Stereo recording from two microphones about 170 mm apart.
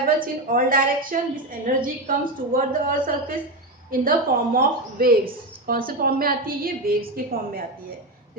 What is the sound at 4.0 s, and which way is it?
A woman's voice, 55° right (ahead or behind).